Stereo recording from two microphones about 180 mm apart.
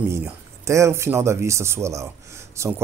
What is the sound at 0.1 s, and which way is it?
Speech, 15° right (ahead or behind).